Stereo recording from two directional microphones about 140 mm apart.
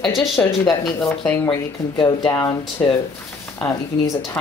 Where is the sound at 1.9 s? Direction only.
35° left (ahead or behind).